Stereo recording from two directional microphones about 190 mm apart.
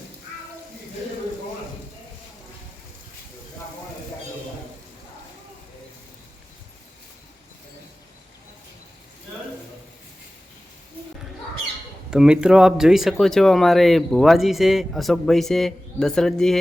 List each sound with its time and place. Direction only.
12.1 s speech: 5° right (ahead or behind)